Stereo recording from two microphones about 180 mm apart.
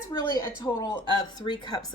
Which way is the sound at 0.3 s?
20° left (ahead or behind).